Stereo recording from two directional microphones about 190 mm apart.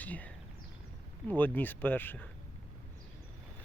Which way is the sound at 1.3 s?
10° left (ahead or behind).